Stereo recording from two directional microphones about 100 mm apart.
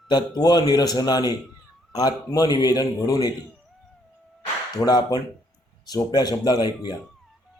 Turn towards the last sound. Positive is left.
turn(degrees=45)  # may be behind; listen again after turning